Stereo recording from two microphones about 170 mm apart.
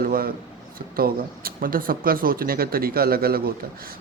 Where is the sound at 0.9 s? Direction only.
60° right (ahead or behind).